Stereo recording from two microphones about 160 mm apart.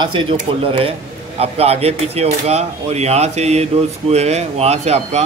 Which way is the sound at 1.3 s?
40° right (ahead or behind).